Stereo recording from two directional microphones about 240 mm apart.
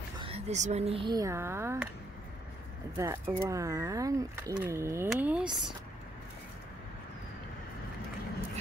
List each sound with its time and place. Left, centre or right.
0.2 s speech: right; by 1.8 s centre
3.0 s speech: centre